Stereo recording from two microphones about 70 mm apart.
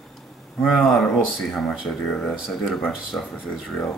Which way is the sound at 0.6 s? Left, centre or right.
Centre.